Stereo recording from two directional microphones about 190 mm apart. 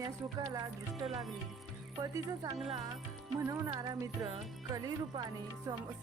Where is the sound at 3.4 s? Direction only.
15° right (ahead or behind).